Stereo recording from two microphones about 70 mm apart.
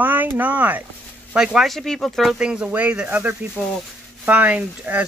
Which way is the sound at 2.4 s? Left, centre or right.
Centre.